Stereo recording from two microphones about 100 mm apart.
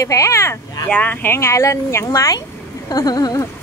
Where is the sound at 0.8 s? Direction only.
15° left (ahead or behind); by 2.4 s 35° left (ahead or behind).